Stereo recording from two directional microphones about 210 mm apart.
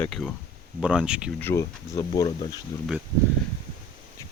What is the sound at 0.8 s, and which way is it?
Speech, 5° right (ahead or behind).